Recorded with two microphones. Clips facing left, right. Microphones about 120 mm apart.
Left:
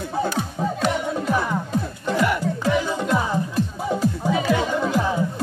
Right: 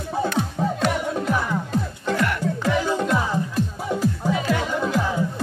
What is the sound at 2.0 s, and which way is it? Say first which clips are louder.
Music: left 2 dB; 10° left (ahead or behind).